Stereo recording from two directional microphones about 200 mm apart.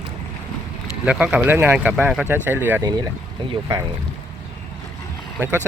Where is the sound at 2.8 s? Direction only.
20° right (ahead or behind).